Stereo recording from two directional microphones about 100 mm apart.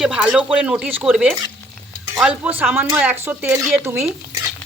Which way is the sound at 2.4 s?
15° right (ahead or behind).